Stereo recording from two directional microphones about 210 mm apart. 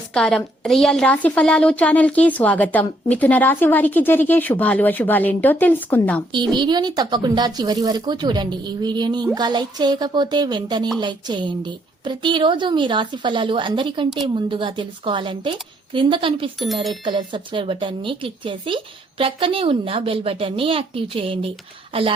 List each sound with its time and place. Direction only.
0.1 s a woman's voice: 5° left (ahead or behind)
6.5 s speech: 20° right (ahead or behind)